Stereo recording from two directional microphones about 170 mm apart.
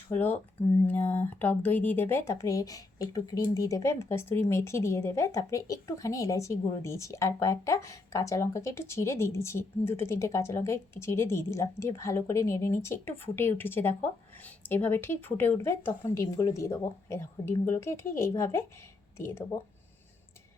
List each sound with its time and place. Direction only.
0.1 s speech: 10° left (ahead or behind)